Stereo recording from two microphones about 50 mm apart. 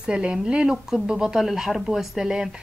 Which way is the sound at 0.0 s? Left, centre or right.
Centre.